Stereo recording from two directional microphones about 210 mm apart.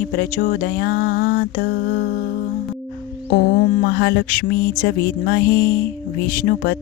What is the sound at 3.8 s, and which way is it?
Speech, 50° left (ahead or behind).